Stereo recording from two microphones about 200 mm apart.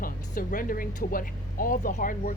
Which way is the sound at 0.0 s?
45° left (ahead or behind).